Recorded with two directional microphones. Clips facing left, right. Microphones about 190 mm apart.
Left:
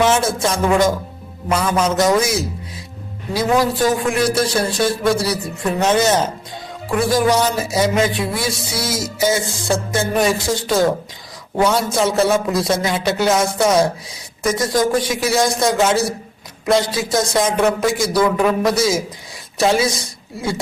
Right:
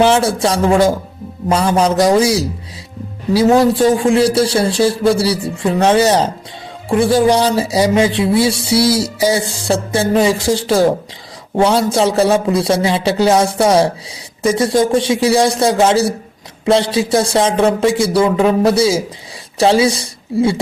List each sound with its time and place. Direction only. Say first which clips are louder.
0.0 s a man's voice: right 4 dB; 35° right (ahead or behind)